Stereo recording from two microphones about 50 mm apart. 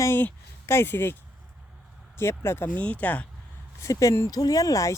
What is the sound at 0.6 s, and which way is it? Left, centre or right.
Speech, left.